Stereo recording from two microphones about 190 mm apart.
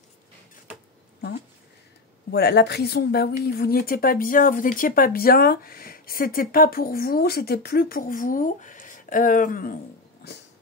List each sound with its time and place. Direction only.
2.3 s a woman's voice: 60° left (ahead or behind)